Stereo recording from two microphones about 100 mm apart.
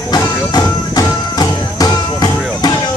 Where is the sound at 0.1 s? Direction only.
40° left (ahead or behind).